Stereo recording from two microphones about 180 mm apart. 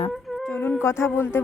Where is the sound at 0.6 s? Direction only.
15° left (ahead or behind).